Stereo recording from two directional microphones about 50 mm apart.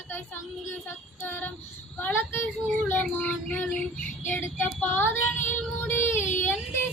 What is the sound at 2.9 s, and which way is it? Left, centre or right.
Child singing, left.